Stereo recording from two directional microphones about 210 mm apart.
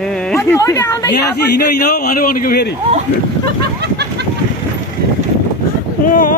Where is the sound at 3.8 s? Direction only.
50° right (ahead or behind).